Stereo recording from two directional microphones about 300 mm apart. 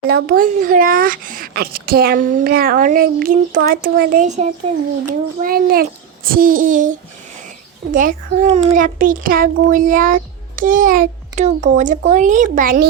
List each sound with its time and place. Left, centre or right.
0.1 s a child's voice: right